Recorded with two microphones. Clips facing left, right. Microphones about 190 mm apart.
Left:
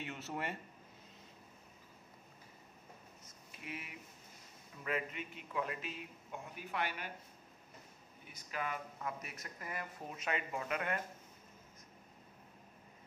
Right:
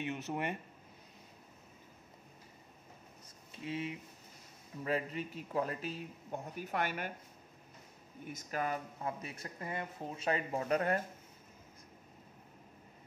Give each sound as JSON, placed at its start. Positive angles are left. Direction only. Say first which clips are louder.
{"t": 0.0, "sound": "speech", "louder": "right 5 dB", "side_deg": -15}
{"t": 3.5, "sound": "speech", "louder": "right 9 dB", "side_deg": -25}
{"t": 8.3, "sound": "speech", "louder": "right 5 dB", "side_deg": -45}
{"t": 9.0, "sound": "speech", "louder": "right 4 dB", "side_deg": -30}